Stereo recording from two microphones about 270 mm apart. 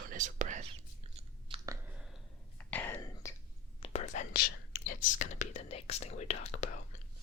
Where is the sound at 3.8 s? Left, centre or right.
Left.